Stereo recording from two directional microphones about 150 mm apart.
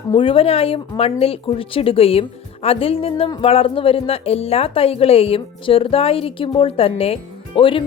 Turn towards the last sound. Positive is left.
turn(degrees=35)  # may be behind; listen again after turning